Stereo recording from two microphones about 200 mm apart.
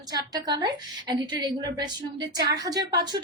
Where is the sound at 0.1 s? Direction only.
20° right (ahead or behind).